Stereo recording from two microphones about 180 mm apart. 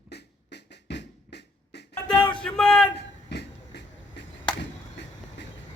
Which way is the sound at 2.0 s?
5° left (ahead or behind).